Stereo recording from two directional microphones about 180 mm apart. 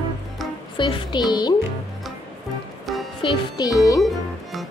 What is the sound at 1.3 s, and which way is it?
Speech, 25° left (ahead or behind).